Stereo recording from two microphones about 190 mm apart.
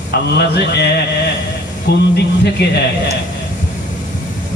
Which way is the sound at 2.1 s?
60° left (ahead or behind).